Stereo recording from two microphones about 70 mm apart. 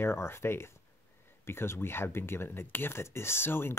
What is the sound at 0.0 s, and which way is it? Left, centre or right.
Speech, left.